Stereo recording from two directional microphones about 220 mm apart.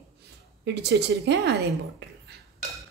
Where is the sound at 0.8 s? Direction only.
50° right (ahead or behind).